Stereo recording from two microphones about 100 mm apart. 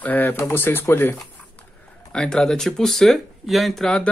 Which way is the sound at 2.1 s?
5° left (ahead or behind).